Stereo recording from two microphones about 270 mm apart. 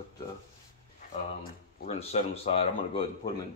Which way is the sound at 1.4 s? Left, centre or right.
Left.